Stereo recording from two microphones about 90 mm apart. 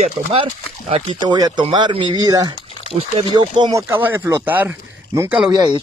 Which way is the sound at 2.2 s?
45° right (ahead or behind).